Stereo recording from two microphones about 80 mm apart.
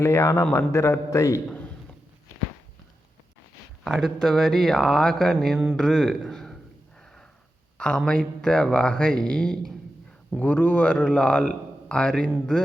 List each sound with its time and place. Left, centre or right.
0.0 s a man's voice: left
3.8 s speech: centre
6.3 s a sound: centre
7.8 s speech: centre
10.4 s speech: centre